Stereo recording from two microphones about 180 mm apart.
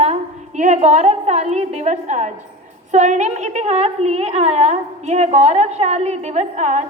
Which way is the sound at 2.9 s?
40° right (ahead or behind).